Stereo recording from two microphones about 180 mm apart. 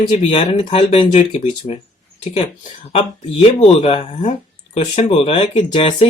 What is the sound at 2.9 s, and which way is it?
Speech, 30° left (ahead or behind).